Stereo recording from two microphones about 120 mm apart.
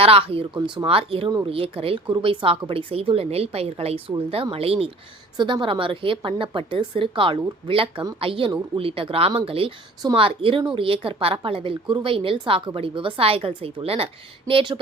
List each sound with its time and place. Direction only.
0.0 s a woman's voice: 55° right (ahead or behind)
5.4 s a woman's voice: 40° right (ahead or behind)